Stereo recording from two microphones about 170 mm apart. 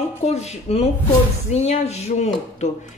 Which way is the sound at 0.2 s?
40° left (ahead or behind).